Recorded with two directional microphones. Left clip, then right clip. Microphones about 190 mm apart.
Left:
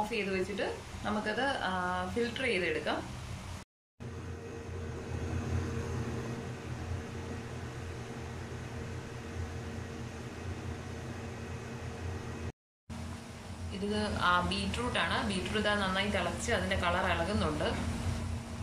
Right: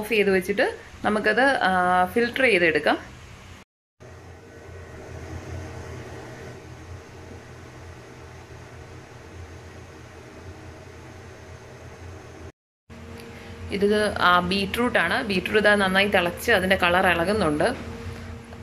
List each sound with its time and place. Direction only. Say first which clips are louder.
0.1 s a woman's voice: right 13 dB; 45° right (ahead or behind)
13.7 s a woman's voice: right 14 dB; 40° right (ahead or behind)